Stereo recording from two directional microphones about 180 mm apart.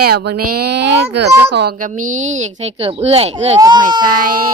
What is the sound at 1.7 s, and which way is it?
Speech, 45° right (ahead or behind).